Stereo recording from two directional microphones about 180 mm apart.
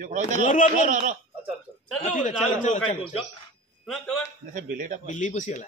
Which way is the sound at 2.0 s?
40° left (ahead or behind).